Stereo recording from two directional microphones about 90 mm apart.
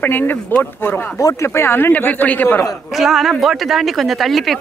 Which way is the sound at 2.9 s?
5° right (ahead or behind).